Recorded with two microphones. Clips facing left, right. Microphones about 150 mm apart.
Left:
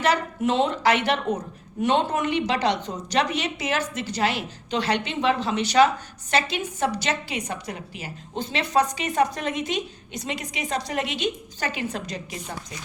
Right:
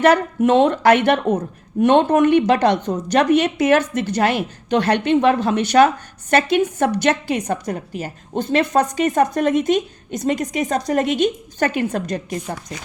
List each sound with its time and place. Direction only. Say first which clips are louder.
0.0 s a woman's voice: right 8 dB; 55° right (ahead or behind)